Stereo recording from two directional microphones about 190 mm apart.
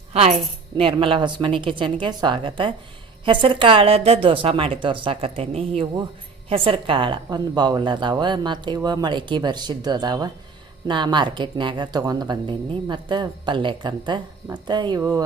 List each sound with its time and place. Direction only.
0.1 s a woman's voice: 35° right (ahead or behind); by 15.2 s 15° right (ahead or behind)